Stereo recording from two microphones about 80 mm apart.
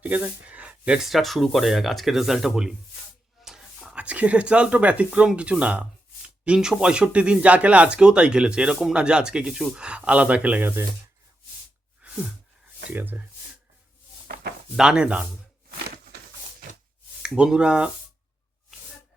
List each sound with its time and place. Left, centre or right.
0.0 s speech: centre
1.0 s speech: centre
3.4 s a sound: centre
3.8 s speech: centre
12.0 s a sound: centre
12.9 s speech: right
14.8 s speech: centre
17.2 s speech: centre